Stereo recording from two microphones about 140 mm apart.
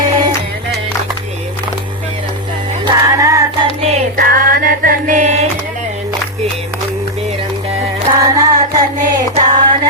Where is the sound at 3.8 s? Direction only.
45° right (ahead or behind).